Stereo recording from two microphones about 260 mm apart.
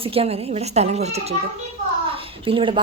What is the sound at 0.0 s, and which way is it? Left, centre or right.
A woman's voice, right.